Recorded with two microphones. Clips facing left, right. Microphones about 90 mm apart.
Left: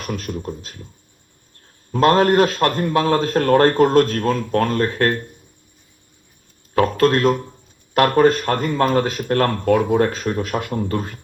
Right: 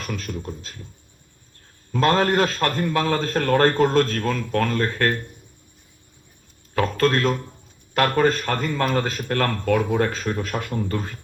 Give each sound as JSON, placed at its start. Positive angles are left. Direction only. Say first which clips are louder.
{"t": 0.1, "sound": "speech", "louder": "left 5 dB", "side_deg": 35}
{"t": 2.0, "sound": "a man's voice", "louder": "left 5 dB", "side_deg": 30}
{"t": 4.0, "sound": "a man's voice", "louder": "left 4 dB", "side_deg": 20}
{"t": 4.3, "sound": "speech", "louder": "left 4 dB", "side_deg": 35}
{"t": 6.8, "sound": "a man's voice", "louder": "left 4 dB", "side_deg": 30}
{"t": 8.6, "sound": "a man's voice", "louder": "left 5 dB", "side_deg": 35}